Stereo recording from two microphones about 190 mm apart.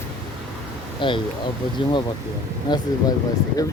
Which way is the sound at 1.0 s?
25° left (ahead or behind).